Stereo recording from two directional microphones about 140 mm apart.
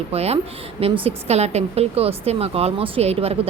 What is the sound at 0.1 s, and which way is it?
A woman's voice, 45° right (ahead or behind).